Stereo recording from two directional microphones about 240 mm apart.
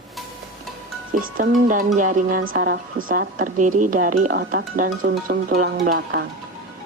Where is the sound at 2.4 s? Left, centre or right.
Right.